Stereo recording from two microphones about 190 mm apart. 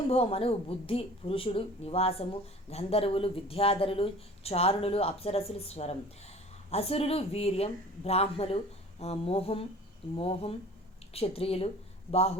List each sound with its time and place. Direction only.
0.1 s a woman's voice: 30° left (ahead or behind)